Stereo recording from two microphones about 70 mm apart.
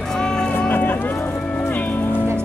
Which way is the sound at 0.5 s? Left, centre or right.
Left.